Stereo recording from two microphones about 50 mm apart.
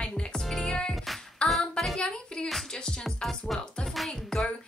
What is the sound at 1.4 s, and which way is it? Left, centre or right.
Speech, centre.